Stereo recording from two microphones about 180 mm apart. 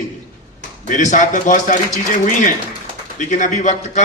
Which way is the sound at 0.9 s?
45° left (ahead or behind).